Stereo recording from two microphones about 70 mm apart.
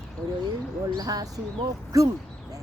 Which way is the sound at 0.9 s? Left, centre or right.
Right.